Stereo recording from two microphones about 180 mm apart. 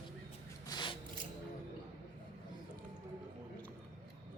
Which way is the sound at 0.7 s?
25° left (ahead or behind).